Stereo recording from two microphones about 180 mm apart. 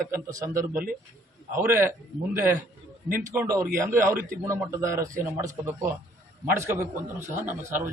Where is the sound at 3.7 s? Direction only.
50° right (ahead or behind).